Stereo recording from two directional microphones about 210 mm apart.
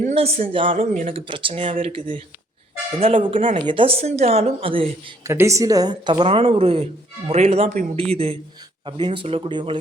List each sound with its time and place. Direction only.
0.0 s speech: 30° right (ahead or behind)
0.9 s speech: 35° right (ahead or behind)
1.3 s speech: 25° right (ahead or behind)
5.2 s a woman's voice: 15° right (ahead or behind)